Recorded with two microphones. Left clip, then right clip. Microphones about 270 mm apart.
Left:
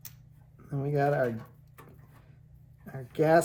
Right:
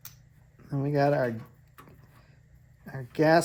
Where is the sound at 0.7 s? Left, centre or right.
Right.